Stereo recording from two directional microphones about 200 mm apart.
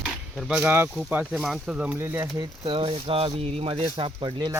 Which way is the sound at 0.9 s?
Centre (ahead or behind).